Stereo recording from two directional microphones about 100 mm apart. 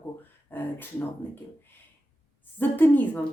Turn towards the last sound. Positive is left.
turn(degrees=20)  # may be behind; listen again after turning